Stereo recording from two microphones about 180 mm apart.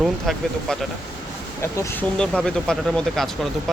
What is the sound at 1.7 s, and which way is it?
Speech, 15° left (ahead or behind).